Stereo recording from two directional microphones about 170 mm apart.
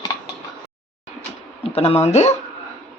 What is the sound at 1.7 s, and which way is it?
Speech, 35° left (ahead or behind).